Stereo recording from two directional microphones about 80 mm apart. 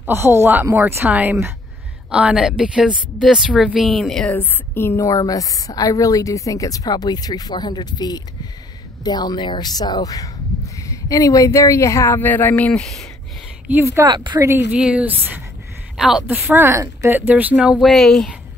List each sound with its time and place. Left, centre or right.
0.0 s speech: right; by 4.3 s centre
4.3 s a woman's voice: left
12.2 s speech: left
12.7 s speech: centre
13.7 s speech: right
14.0 s speech: right
14.7 s speech: centre
16.0 s speech: centre
16.5 s speech: right
17.7 s speech: centre